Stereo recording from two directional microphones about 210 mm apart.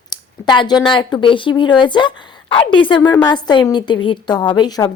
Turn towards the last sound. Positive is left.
turn(degrees=20)  # may be behind; listen again after turning